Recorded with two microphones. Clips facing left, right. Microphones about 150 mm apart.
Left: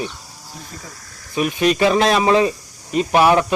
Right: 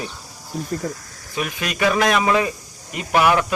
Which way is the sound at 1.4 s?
25° left (ahead or behind).